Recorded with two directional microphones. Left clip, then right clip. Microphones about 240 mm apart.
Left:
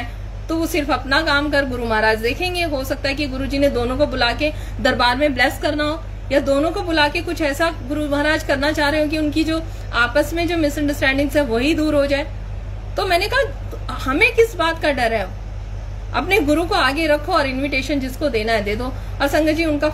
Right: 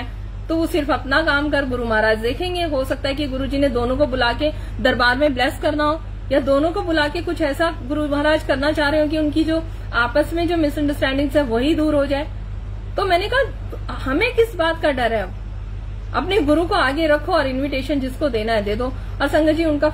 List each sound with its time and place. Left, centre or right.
0.5 s a woman's voice: centre